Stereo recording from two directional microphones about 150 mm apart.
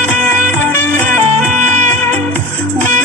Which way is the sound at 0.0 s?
60° right (ahead or behind).